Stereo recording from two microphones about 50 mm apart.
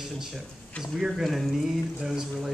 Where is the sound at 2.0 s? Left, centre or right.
Centre.